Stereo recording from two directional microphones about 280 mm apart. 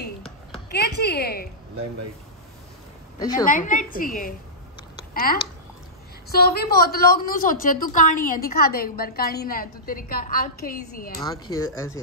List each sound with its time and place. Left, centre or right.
0.7 s a woman's voice: left
3.2 s a woman's voice: centre
3.4 s a woman's voice: left
11.2 s speech: centre